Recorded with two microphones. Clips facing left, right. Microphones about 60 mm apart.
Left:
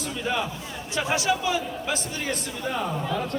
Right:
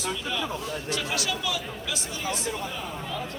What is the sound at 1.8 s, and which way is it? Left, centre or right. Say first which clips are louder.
Speech: left 3 dB; left.